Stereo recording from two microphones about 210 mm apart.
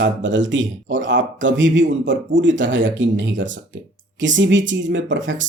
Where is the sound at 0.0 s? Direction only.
60° right (ahead or behind).